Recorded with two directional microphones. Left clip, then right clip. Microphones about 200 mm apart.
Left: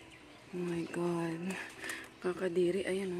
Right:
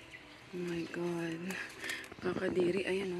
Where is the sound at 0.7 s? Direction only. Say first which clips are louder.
Left 3 dB; 25° left (ahead or behind).